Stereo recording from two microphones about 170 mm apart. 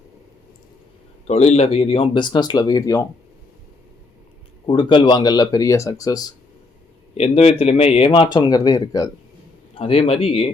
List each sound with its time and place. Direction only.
1.3 s speech: 40° left (ahead or behind); by 3.1 s 20° left (ahead or behind)
4.6 s speech: 30° left (ahead or behind)
7.2 s speech: 35° left (ahead or behind); by 9.0 s 20° left (ahead or behind)
9.7 s speech: 35° left (ahead or behind)